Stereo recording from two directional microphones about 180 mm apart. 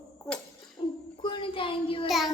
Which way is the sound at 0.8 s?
25° left (ahead or behind).